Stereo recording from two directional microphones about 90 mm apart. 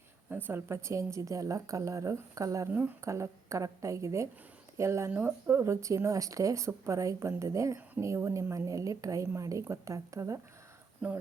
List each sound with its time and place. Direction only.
0.3 s a woman's voice: 20° right (ahead or behind)
11.0 s speech: 15° right (ahead or behind)